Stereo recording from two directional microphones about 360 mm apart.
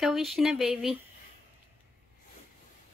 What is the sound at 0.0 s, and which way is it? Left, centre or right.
Speech, centre.